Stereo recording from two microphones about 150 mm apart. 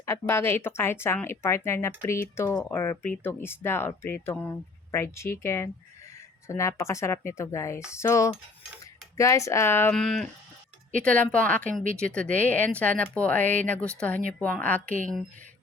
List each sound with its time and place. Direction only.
0.0 s speech: 20° left (ahead or behind)
9.9 s speech: centre (ahead or behind)
11.6 s speech: 60° right (ahead or behind)
11.9 s speech: 5° left (ahead or behind)